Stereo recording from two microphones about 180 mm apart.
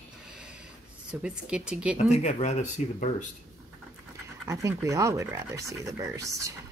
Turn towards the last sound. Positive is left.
turn(degrees=-15)  # may be behind; listen again after turning